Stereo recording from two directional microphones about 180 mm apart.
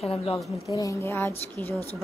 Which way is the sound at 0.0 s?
35° left (ahead or behind).